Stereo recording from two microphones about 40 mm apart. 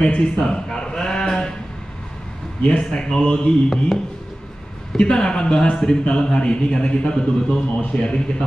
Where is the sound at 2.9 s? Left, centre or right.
Centre.